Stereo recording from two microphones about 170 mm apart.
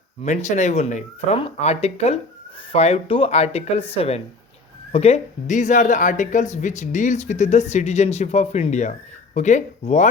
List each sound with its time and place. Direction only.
0.3 s speech: 45° left (ahead or behind)